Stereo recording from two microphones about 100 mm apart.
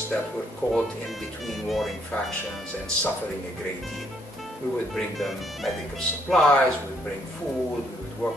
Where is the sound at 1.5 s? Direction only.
Centre (ahead or behind).